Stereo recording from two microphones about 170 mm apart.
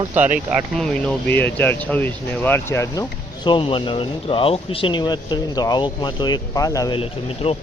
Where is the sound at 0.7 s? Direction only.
5° left (ahead or behind); by 7.0 s 20° left (ahead or behind).